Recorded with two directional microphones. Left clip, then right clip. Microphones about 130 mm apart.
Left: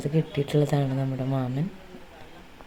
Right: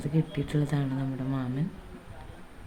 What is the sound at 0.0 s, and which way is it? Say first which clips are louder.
Speech: left 5 dB; 30° left (ahead or behind).